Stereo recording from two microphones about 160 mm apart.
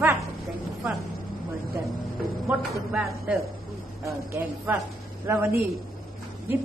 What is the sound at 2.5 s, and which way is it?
Speech, 5° right (ahead or behind).